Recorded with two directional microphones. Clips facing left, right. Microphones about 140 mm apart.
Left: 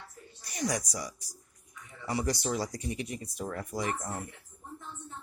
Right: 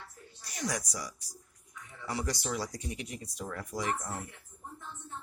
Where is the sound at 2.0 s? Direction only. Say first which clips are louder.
Left 4 dB; 25° left (ahead or behind).